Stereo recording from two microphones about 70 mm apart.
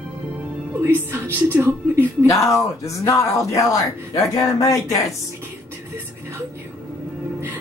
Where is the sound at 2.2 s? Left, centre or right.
Left.